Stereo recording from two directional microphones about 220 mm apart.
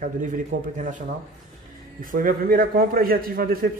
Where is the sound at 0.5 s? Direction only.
35° right (ahead or behind).